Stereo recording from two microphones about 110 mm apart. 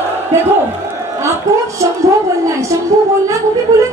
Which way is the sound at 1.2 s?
25° right (ahead or behind).